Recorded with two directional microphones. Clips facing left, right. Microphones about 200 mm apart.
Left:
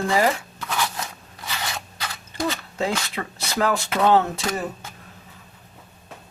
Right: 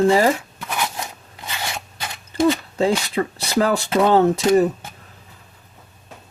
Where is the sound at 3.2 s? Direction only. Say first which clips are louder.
Right 5 dB; 35° right (ahead or behind).